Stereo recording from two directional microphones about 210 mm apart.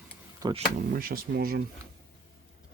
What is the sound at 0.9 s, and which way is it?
Speech, 45° right (ahead or behind).